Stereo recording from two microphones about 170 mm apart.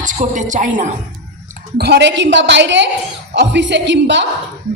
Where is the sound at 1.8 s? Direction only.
85° right.